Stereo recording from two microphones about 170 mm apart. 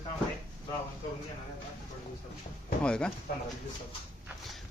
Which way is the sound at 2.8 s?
5° left (ahead or behind).